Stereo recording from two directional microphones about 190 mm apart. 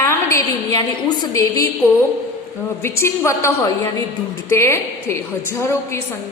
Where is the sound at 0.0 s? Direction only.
15° left (ahead or behind).